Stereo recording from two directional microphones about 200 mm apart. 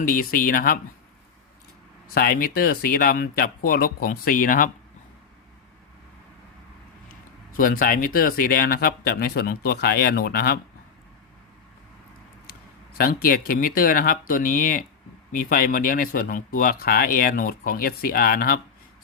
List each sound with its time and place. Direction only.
0.0 s speech: 45° left (ahead or behind)
2.1 s speech: 50° left (ahead or behind)
7.5 s speech: 45° left (ahead or behind)
13.0 s speech: 50° left (ahead or behind)